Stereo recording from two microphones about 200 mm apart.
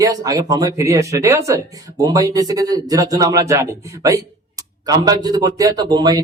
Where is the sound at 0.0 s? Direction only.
20° right (ahead or behind).